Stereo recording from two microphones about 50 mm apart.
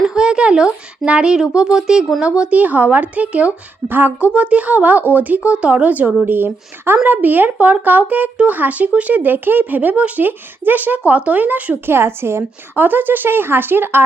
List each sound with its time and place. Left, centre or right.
0.1 s speech: centre
3.8 s speech: right
4.2 s speech: right
6.2 s speech: right
11.9 s speech: right
12.7 s speech: right